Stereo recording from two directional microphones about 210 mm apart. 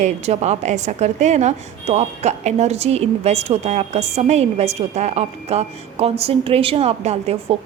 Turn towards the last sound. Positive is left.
turn(degrees=-30)  # may be behind; listen again after turning